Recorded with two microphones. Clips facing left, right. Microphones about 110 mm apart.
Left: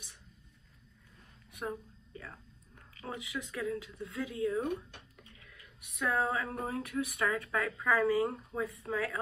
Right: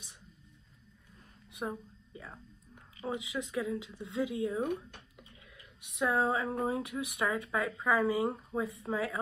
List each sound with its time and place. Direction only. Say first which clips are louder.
1.5 s speech: right 1 dB; 25° right (ahead or behind)